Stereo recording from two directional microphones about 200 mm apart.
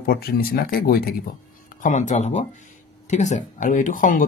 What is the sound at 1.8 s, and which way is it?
Speech, 35° left (ahead or behind).